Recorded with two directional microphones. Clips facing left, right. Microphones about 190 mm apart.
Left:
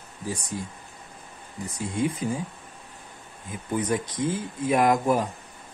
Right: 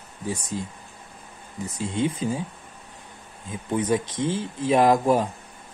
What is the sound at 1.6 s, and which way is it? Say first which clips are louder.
Speech: right 1 dB; 25° right (ahead or behind).